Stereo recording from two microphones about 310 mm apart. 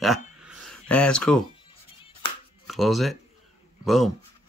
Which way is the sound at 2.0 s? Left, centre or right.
Centre.